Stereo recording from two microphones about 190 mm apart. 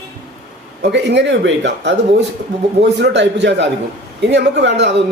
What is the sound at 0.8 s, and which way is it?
A man's voice, 65° right (ahead or behind).